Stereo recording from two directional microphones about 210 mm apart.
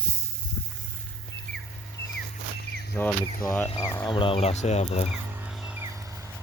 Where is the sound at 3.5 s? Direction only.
10° left (ahead or behind); by 5.1 s 30° left (ahead or behind).